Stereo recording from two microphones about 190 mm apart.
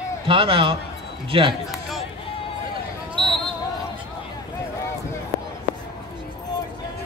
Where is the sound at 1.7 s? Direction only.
Centre (ahead or behind).